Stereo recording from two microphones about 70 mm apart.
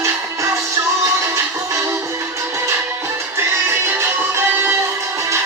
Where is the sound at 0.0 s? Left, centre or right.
Right.